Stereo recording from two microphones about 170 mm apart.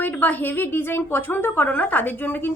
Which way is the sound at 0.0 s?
10° left (ahead or behind).